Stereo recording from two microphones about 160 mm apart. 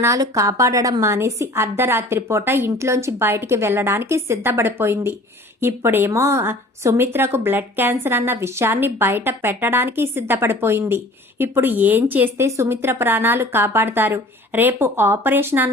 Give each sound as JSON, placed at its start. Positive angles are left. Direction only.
{"t": 0.0, "sound": "speech", "side_deg": -20}